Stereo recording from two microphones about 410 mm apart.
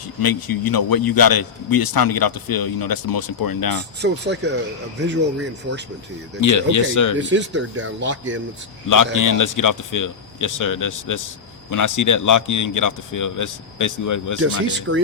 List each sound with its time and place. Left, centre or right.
0.2 s a man's voice: left
4.0 s speech: right
6.4 s speech: left
7.2 s speech: right
9.1 s speech: left
14.9 s speech: right